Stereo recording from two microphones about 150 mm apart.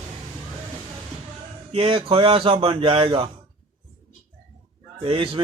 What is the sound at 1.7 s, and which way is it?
Speech, 40° right (ahead or behind).